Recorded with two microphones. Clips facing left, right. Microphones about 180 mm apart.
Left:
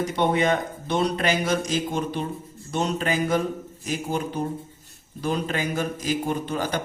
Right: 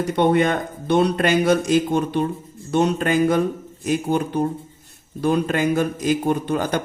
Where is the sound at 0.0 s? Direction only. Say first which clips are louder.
Right 5 dB; 55° right (ahead or behind).